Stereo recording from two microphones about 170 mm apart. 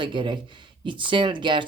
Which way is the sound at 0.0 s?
30° right (ahead or behind).